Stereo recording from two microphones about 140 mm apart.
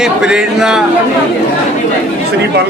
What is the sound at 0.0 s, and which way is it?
Speech, 5° right (ahead or behind).